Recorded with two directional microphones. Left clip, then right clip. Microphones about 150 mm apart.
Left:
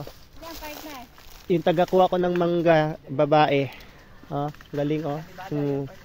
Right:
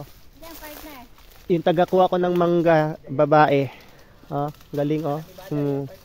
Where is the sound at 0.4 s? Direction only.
55° left (ahead or behind).